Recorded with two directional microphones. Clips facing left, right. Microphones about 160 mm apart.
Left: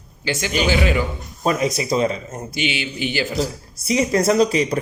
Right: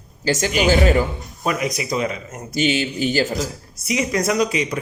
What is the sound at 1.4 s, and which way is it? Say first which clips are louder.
Speech: left 3 dB; 30° left (ahead or behind).